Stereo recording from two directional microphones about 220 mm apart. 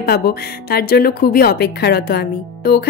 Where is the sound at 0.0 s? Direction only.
40° left (ahead or behind).